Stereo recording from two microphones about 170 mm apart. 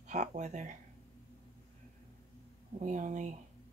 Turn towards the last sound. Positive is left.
turn(degrees=-45)  # may be behind; listen again after turning